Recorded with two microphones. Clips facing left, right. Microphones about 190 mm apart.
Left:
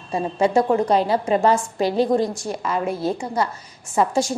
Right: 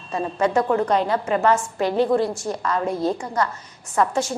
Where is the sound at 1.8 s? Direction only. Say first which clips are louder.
Left 1 dB; 35° left (ahead or behind).